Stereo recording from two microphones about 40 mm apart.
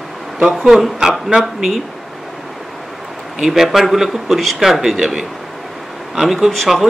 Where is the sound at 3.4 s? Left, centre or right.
Centre.